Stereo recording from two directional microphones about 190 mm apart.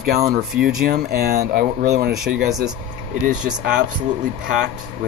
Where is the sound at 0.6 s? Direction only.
5° right (ahead or behind).